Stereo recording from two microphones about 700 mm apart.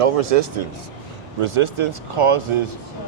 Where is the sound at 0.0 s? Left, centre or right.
Right.